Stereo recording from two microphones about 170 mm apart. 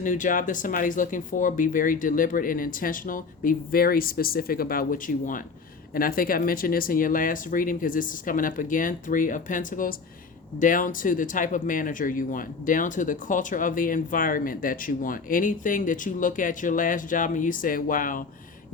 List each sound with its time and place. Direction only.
0.0 s speech: 50° left (ahead or behind)